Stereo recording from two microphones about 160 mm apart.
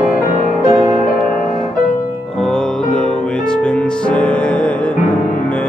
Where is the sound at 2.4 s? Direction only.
5° left (ahead or behind).